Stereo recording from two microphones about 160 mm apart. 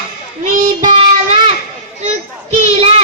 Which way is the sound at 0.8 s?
45° right (ahead or behind).